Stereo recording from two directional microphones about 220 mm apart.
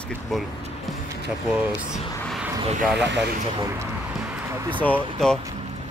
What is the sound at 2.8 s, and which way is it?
Speech, 5° right (ahead or behind).